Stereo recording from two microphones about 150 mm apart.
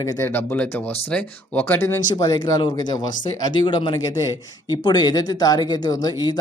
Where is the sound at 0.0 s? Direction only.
15° left (ahead or behind).